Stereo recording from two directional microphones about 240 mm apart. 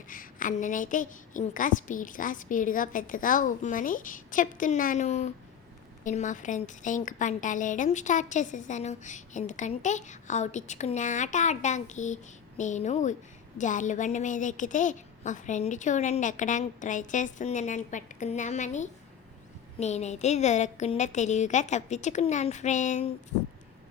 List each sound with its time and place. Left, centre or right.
0.1 s a woman's voice: left